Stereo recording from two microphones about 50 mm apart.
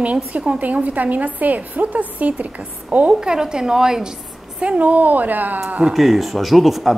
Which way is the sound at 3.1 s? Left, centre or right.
Centre.